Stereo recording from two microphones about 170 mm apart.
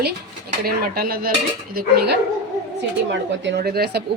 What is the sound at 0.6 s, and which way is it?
Speech, 60° right (ahead or behind).